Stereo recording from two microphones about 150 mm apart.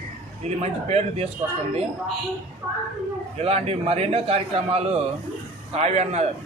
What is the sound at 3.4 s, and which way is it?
A man's voice, 45° right (ahead or behind).